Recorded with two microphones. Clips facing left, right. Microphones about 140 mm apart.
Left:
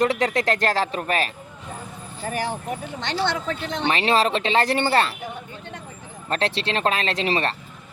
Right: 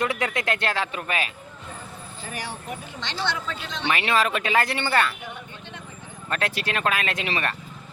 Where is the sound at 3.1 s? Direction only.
55° left (ahead or behind).